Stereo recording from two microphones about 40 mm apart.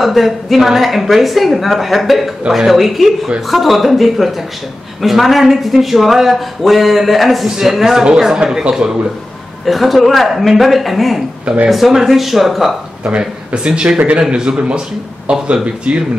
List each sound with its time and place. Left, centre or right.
0.0 s a woman's voice: centre
7.4 s speech: centre
9.7 s a woman's voice: centre
11.4 s speech: right
11.7 s a woman's voice: centre
13.5 s speech: right